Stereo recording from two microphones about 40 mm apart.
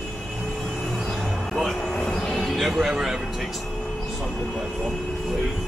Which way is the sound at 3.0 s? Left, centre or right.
Centre.